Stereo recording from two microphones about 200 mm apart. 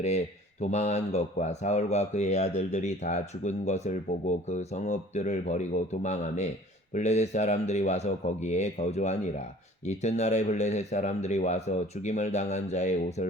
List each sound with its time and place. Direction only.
0.6 s speech: 35° left (ahead or behind)